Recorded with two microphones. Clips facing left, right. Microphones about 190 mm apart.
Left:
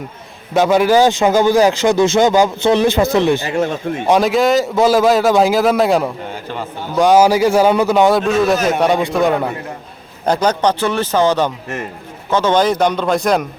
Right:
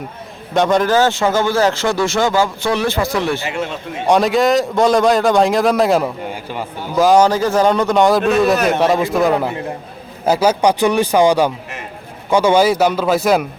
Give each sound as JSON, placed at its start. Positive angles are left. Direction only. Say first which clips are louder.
{"t": 0.5, "sound": "a man's voice", "louder": "left 2 dB", "side_deg": 5}
{"t": 3.4, "sound": "speech", "louder": "left 5 dB", "side_deg": 40}
{"t": 4.0, "sound": "a man's voice", "louder": "even", "side_deg": 0}
{"t": 6.3, "sound": "a man's voice", "louder": "even", "side_deg": -10}